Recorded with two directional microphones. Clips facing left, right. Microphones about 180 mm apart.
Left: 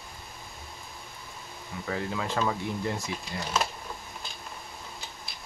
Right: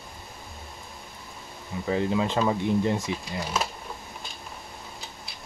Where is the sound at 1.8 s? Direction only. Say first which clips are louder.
Right 7 dB; 20° right (ahead or behind).